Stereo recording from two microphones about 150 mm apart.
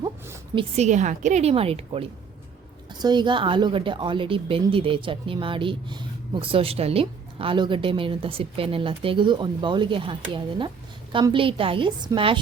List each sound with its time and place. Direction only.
0.5 s a woman's voice: 50° right (ahead or behind)
3.0 s a woman's voice: 30° right (ahead or behind)